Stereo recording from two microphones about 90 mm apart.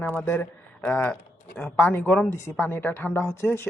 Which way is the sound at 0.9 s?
15° left (ahead or behind).